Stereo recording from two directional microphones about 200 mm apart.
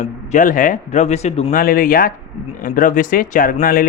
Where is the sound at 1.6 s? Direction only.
45° left (ahead or behind).